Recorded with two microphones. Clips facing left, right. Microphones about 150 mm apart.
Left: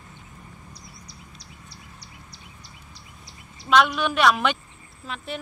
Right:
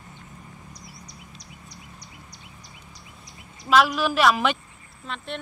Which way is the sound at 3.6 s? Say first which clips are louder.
Even; centre (ahead or behind).